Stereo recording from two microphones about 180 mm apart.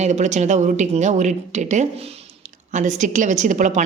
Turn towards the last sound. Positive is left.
turn(degrees=-45)  # may be behind; listen again after turning